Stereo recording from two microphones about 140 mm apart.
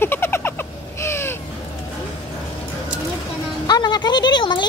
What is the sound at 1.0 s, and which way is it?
Crow, 20° left (ahead or behind).